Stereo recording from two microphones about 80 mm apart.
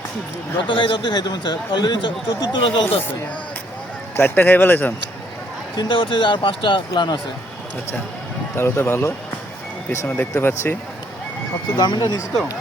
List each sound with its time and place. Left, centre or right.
0.7 s speech: left
2.8 s speech: left
4.2 s speech: left
5.7 s speech: left
6.9 s speech: left
8.5 s speech: left
10.3 s speech: left
11.8 s speech: left